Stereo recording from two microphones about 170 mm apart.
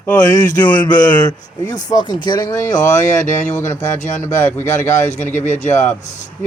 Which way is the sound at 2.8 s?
45° left (ahead or behind).